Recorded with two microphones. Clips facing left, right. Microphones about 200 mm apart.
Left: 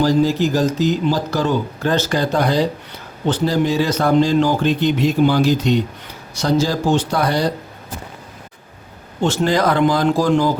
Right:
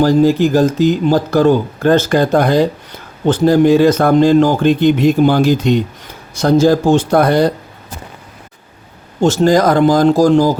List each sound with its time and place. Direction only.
0.0 s speech: 50° right (ahead or behind)
9.2 s speech: 40° right (ahead or behind)